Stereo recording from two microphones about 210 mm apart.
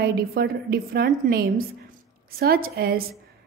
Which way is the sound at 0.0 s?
45° right (ahead or behind).